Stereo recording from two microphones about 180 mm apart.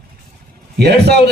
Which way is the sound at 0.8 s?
65° right (ahead or behind).